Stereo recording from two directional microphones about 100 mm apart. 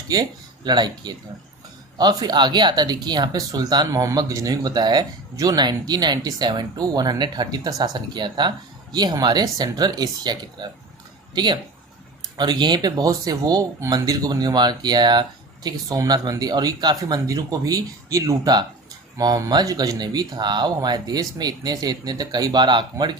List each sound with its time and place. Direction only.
0.1 s speech: 40° right (ahead or behind)
3.8 s speech: 30° right (ahead or behind); by 23.1 s 50° right (ahead or behind)